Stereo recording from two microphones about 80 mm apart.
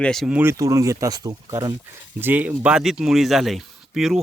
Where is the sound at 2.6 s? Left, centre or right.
Centre.